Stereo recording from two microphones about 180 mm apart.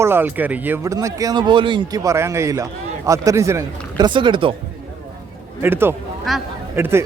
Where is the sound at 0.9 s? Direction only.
20° right (ahead or behind).